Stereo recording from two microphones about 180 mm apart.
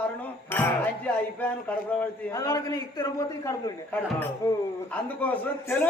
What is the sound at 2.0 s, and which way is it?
A man's voice, 20° left (ahead or behind).